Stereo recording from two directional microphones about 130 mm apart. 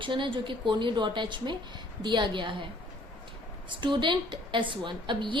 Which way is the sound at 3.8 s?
40° right (ahead or behind).